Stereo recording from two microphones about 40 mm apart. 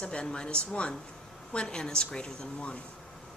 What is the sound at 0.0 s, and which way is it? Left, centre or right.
Speech, left.